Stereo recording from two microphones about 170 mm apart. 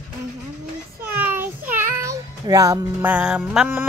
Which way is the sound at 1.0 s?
10° right (ahead or behind).